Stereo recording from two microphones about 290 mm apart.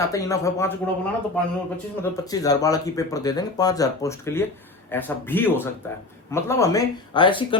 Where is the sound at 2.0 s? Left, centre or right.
Centre.